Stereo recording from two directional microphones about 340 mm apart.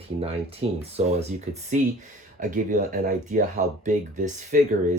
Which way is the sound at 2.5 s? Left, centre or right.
Right.